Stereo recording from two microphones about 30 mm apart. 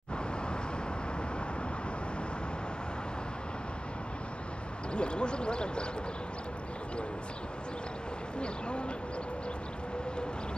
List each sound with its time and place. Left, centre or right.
4.9 s speech: left
8.4 s speech: left